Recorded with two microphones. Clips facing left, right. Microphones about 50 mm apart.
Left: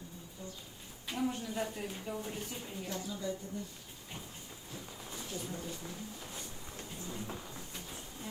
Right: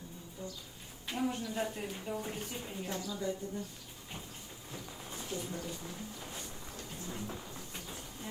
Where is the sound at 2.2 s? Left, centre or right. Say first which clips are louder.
Right 1 dB; right.